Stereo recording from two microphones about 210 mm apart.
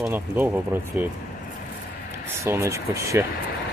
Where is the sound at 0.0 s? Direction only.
10° right (ahead or behind).